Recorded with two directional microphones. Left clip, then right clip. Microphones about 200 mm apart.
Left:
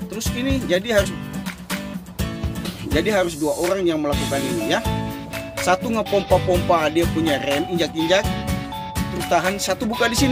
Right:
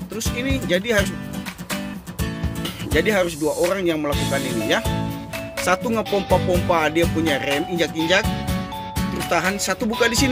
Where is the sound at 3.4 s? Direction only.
Centre (ahead or behind).